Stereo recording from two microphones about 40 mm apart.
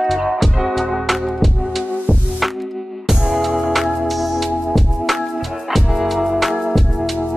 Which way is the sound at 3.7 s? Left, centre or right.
Centre.